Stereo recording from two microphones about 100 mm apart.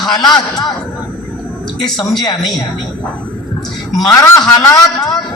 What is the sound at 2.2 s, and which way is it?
Speech, 45° left (ahead or behind).